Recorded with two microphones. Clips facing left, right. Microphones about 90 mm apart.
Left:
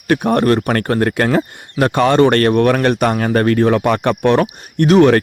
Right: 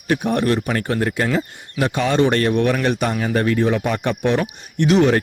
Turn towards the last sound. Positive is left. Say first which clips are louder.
# left 5 dB
turn(degrees=60)  # may be behind; listen again after turning